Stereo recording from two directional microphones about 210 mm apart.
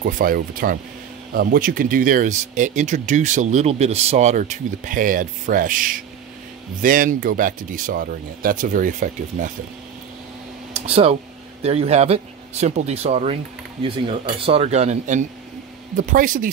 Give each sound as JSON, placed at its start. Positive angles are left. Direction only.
{"t": 0.0, "sound": "speech", "side_deg": -40}
{"t": 10.7, "sound": "speech", "side_deg": -30}